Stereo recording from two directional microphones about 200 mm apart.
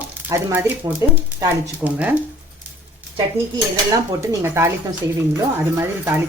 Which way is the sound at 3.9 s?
15° right (ahead or behind).